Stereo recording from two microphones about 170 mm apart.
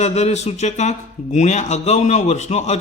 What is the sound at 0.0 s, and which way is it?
A man's voice, 40° left (ahead or behind).